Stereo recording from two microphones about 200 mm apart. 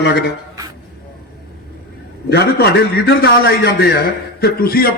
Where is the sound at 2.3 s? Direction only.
55° left (ahead or behind).